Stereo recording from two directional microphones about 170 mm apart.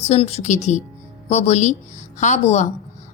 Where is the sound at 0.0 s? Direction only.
40° left (ahead or behind).